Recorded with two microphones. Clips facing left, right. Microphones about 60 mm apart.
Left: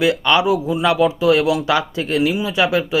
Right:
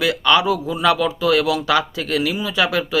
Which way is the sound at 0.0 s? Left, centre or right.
Left.